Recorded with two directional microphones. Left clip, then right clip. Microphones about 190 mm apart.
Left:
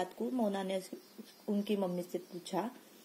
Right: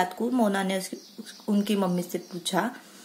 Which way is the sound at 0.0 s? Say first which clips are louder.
Right 10 dB; centre (ahead or behind).